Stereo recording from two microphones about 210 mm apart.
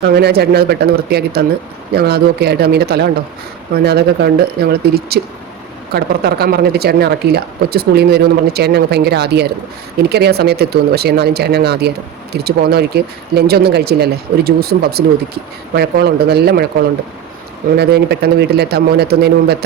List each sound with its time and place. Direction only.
0.0 s speech: 50° right (ahead or behind)
17.7 s speech: 50° right (ahead or behind)